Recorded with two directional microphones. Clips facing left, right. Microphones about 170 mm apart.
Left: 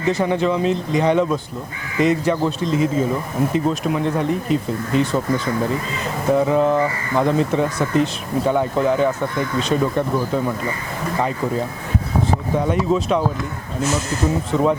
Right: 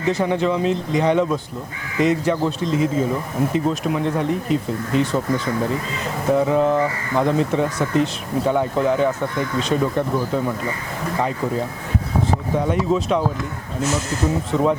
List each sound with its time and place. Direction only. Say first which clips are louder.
0.0 s speech: left 1 dB; 15° left (ahead or behind)
14.5 s speech: left 1 dB; 25° left (ahead or behind)